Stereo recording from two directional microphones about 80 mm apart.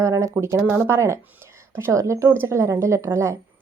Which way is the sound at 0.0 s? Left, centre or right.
Right.